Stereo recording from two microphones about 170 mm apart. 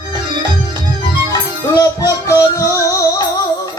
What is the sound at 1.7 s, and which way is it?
Music, 20° left (ahead or behind).